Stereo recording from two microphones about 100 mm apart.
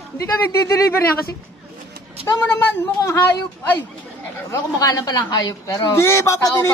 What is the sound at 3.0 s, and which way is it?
Speech, 30° left (ahead or behind).